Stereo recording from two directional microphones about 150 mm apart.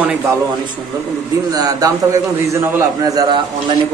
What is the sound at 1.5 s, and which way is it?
A man's voice, 25° right (ahead or behind).